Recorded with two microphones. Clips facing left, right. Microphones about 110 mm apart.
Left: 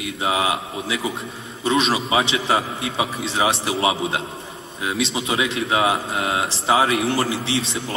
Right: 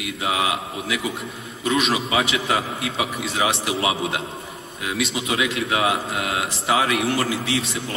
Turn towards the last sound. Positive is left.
turn(degrees=30)  # may be behind; listen again after turning